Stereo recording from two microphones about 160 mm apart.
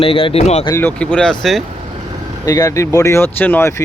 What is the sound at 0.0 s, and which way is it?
Speech, 35° left (ahead or behind).